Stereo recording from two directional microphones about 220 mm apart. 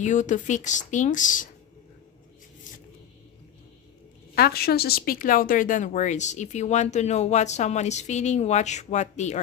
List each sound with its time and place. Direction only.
0.0 s speech: 35° left (ahead or behind)
4.4 s speech: 45° left (ahead or behind)